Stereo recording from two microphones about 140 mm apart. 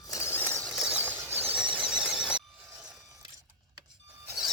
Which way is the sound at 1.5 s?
5° right (ahead or behind).